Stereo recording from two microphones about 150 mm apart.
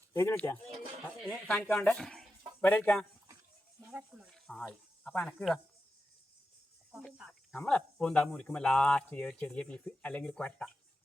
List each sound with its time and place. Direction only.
0.1 s speech: 15° left (ahead or behind)
3.8 s speech: 5° right (ahead or behind)
6.9 s speech: 5° right (ahead or behind)
7.3 s speech: 5° left (ahead or behind)